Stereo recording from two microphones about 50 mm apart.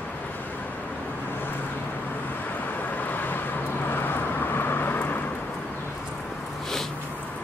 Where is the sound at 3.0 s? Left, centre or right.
Left.